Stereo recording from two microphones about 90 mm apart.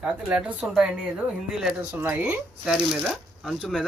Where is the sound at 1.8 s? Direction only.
25° right (ahead or behind).